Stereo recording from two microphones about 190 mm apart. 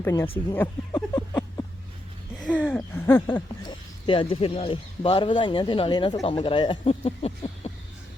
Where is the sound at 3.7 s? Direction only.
25° left (ahead or behind).